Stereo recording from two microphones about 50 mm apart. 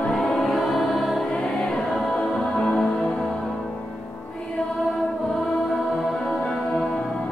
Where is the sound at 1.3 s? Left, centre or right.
Centre.